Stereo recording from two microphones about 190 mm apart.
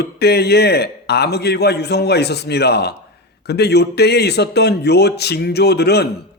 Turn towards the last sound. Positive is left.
turn(degrees=60)  # may be behind; listen again after turning